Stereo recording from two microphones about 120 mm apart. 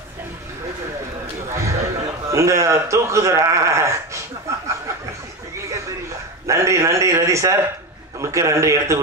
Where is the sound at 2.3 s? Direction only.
25° right (ahead or behind).